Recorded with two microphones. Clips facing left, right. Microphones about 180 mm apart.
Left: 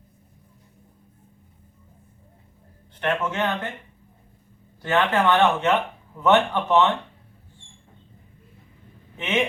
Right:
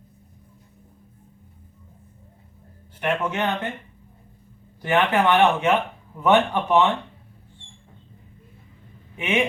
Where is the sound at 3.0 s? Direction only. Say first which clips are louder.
Even; 15° right (ahead or behind).